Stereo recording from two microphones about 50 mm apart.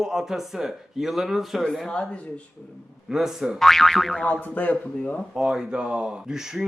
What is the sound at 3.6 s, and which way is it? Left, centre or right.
Speech, centre.